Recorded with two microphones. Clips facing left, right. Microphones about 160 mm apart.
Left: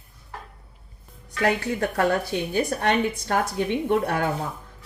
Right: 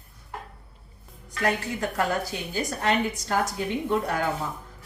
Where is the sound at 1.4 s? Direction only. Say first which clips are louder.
Left 3 dB; 60° left (ahead or behind).